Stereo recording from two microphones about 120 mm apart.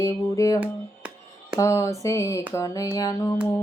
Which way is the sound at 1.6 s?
25° left (ahead or behind).